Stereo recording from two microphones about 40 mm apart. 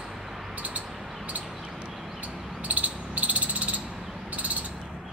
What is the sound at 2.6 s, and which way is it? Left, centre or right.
Cricket, right.